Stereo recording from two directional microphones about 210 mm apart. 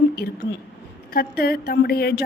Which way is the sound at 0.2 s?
55° left (ahead or behind).